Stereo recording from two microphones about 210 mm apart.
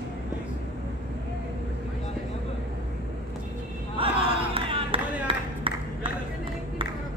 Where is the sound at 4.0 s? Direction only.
25° right (ahead or behind).